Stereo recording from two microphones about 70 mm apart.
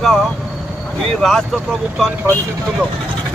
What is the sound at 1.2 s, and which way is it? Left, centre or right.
Speech, centre.